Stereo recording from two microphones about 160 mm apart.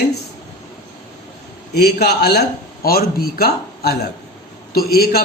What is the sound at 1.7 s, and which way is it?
A man's voice, 90° left.